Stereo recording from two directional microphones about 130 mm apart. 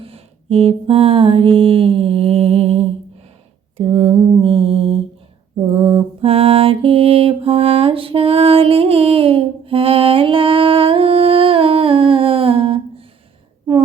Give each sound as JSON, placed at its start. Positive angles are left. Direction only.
{"t": 0.0, "sound": "mantra", "side_deg": -50}
{"t": 3.8, "sound": "a sound", "side_deg": -50}
{"t": 4.2, "sound": "mantra", "side_deg": -45}